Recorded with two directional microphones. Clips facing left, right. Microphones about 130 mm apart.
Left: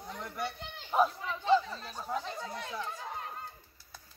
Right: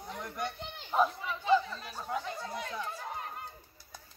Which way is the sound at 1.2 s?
10° right (ahead or behind).